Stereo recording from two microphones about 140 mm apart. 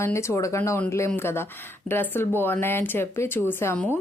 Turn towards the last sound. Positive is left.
turn(degrees=15)  # may be behind; listen again after turning